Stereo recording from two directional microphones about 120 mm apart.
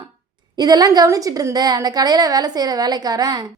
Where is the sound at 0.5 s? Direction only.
35° right (ahead or behind).